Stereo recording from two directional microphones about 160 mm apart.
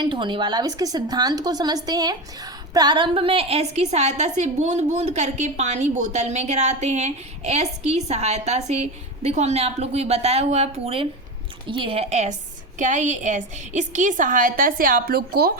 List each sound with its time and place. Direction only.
0.0 s a woman's voice: 30° right (ahead or behind); by 15.5 s 75° right (ahead or behind)